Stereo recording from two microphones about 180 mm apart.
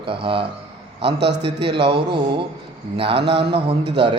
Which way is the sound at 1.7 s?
30° right (ahead or behind).